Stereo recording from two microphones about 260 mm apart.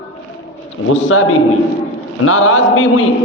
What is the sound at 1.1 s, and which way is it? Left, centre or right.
A man's voice, left.